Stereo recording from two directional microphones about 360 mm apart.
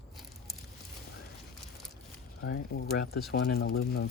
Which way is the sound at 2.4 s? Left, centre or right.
Left.